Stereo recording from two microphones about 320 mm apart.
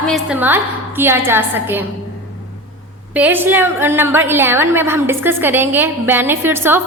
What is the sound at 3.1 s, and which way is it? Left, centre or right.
A woman's voice, centre.